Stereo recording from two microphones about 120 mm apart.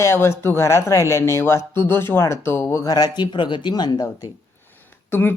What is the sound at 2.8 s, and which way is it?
Speech, 35° left (ahead or behind).